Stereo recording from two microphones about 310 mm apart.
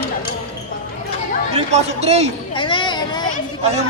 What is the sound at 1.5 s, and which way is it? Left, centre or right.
Speech, right.